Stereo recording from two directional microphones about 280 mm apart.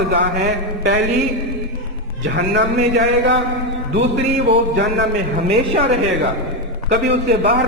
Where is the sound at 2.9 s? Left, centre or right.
Right.